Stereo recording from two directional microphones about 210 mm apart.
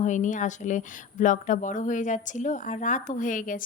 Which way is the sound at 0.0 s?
35° left (ahead or behind).